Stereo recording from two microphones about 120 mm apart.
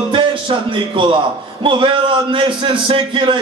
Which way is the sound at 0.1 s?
45° right (ahead or behind).